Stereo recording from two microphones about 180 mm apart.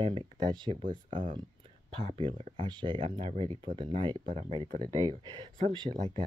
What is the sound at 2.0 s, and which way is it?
Speech, 30° right (ahead or behind).